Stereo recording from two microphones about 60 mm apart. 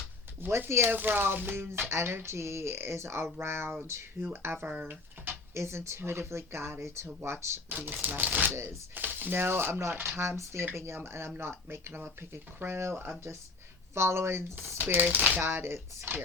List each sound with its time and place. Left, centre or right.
0.7 s speech: right
3.8 s speech: right
4.6 s speech: right
5.5 s speech: right
7.7 s speech: right
8.5 s speech: right
9.0 s speech: right
14.8 s speech: right
15.4 s speech: right